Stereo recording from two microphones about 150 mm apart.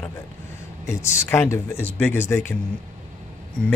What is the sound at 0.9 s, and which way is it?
A man's voice, 20° left (ahead or behind).